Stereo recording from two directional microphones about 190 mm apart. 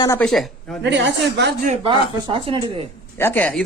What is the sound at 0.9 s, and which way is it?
Speech, 65° right (ahead or behind).